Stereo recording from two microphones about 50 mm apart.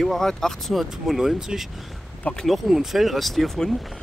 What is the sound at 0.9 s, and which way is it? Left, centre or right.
Speech, centre.